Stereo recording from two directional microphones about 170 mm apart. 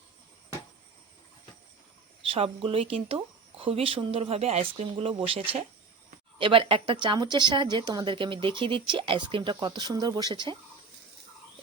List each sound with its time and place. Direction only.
2.2 s speech: 35° right (ahead or behind)
6.4 s speech: 30° right (ahead or behind)